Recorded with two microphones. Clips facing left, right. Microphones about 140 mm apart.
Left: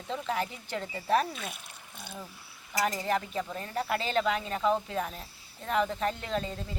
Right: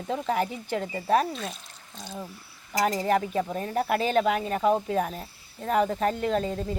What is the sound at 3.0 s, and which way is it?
Speech, 45° right (ahead or behind).